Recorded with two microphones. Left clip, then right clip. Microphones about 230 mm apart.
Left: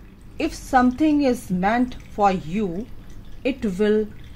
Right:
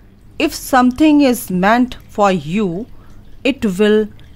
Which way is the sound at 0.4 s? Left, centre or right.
Right.